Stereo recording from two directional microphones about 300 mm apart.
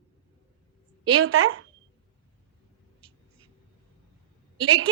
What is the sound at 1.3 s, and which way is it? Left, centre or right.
Speech, right.